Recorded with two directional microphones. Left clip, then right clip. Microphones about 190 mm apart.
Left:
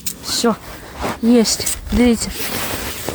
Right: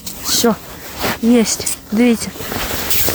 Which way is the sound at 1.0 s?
20° right (ahead or behind).